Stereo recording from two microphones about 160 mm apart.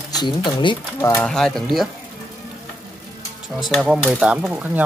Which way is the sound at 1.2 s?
5° left (ahead or behind).